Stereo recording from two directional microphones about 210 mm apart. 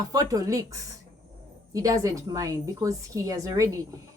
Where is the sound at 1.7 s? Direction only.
15° right (ahead or behind).